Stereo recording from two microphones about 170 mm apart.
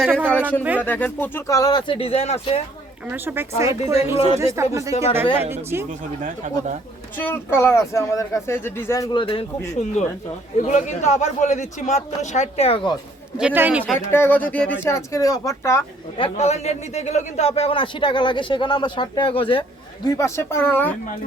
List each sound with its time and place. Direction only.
0.2 s speech: 10° right (ahead or behind)
0.8 s speech: 10° left (ahead or behind); by 2.6 s 40° left (ahead or behind)
3.1 s speech: 10° right (ahead or behind)
3.9 s a man's voice: 35° left (ahead or behind)
4.4 s speech: 15° right (ahead or behind)
6.2 s speech: 45° right (ahead or behind)
7.2 s speech: 10° left (ahead or behind); by 9.5 s 30° left (ahead or behind)
10.6 s a man's voice: 45° left (ahead or behind)
13.4 s speech: 10° right (ahead or behind)
14.1 s speech: 10° left (ahead or behind)
16.1 s a man's voice: 35° left (ahead or behind)
20.1 s speech: 20° left (ahead or behind)